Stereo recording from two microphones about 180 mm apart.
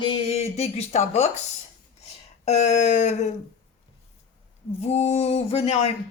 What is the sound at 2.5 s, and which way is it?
Speech, 40° left (ahead or behind).